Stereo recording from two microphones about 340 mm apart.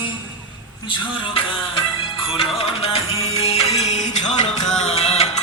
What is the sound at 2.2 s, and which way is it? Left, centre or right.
Music, centre.